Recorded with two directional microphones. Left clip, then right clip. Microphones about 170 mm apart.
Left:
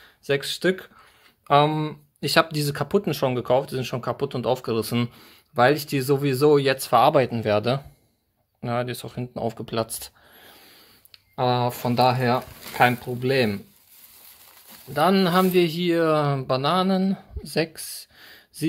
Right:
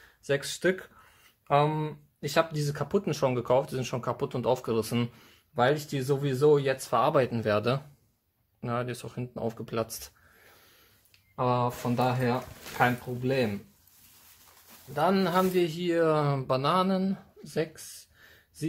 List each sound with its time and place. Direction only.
0.2 s speech: 20° left (ahead or behind)
1.5 s speech: 35° left (ahead or behind)
5.2 s speech: 40° left (ahead or behind); by 7.2 s 25° left (ahead or behind)
7.2 s speech: 15° left (ahead or behind)
11.1 s speech: 55° left (ahead or behind)
15.0 s speech: 35° left (ahead or behind)